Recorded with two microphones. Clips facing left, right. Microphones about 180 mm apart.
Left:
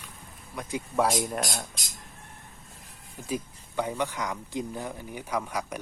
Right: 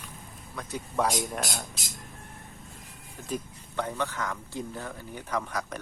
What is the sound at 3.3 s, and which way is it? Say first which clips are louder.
Speech: left 2 dB; 10° left (ahead or behind).